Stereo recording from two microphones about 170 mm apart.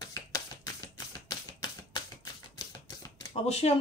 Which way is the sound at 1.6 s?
25° left (ahead or behind).